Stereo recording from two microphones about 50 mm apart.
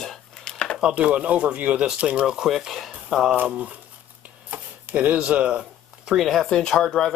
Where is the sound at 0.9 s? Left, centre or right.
Right.